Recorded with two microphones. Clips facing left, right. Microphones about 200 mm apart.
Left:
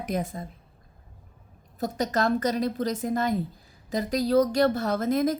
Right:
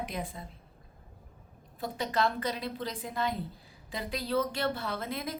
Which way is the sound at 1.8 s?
45° left (ahead or behind).